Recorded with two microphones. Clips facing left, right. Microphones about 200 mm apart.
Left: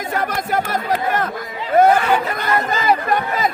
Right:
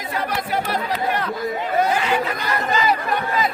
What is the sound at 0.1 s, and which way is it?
Speech, 45° left (ahead or behind).